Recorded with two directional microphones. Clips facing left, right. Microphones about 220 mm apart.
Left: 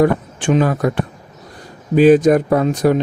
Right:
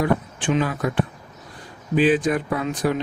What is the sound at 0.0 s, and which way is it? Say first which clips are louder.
Speech: left 7 dB; 45° left (ahead or behind).